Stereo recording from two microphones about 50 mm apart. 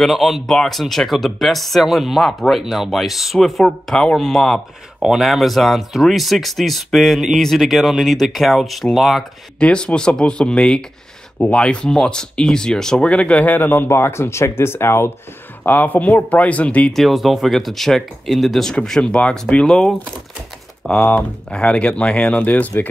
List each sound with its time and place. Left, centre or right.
0.0 s speech: centre
3.9 s speech: centre
5.0 s speech: centre
9.6 s speech: centre
13.1 s speech: left
13.8 s speech: left
15.6 s speech: left
16.9 s speech: centre
21.0 s speech: left